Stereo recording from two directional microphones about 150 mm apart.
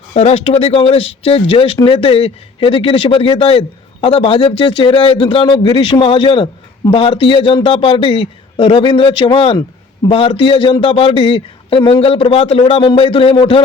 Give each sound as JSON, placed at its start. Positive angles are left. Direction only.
{"t": 0.1, "sound": "a man's voice", "side_deg": 45}